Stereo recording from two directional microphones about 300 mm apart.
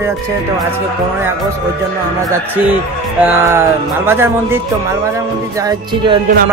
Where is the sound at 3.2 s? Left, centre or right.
Centre.